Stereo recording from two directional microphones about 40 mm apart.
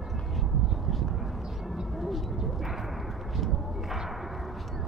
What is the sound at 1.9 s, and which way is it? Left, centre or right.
Vehicle, centre.